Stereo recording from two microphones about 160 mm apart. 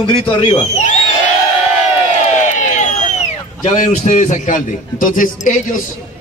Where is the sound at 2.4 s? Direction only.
50° left (ahead or behind).